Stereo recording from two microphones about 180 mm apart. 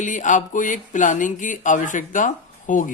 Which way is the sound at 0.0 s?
45° left (ahead or behind).